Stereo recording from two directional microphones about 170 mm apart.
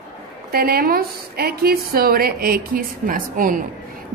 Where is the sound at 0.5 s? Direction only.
60° right (ahead or behind).